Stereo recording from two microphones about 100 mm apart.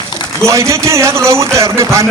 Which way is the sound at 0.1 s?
45° left (ahead or behind).